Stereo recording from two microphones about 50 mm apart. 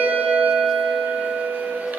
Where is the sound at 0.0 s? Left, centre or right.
Right.